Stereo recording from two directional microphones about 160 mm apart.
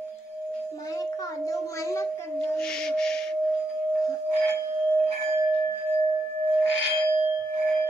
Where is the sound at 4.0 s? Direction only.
15° left (ahead or behind).